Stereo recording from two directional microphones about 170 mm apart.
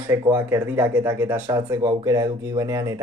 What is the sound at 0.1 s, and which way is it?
Speech, 10° right (ahead or behind).